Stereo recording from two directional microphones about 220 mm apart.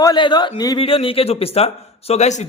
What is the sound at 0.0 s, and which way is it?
A man's voice, 20° left (ahead or behind).